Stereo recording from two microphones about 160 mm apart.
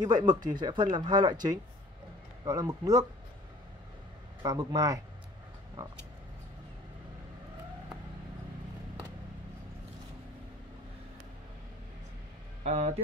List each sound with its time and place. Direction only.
0.0 s speech: 25° right (ahead or behind)
4.4 s speech: 25° right (ahead or behind)
12.6 s speech: 40° right (ahead or behind)